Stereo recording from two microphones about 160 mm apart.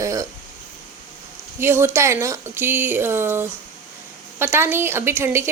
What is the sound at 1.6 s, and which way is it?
A woman's voice, 15° right (ahead or behind).